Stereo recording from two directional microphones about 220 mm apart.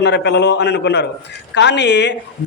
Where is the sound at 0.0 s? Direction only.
50° left (ahead or behind).